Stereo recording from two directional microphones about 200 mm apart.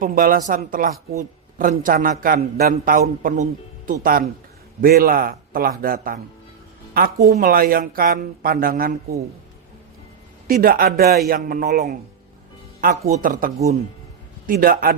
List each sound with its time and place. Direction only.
0.0 s a man's voice: 45° right (ahead or behind)
7.3 s a man's voice: 45° right (ahead or behind)
10.4 s a man's voice: 50° right (ahead or behind)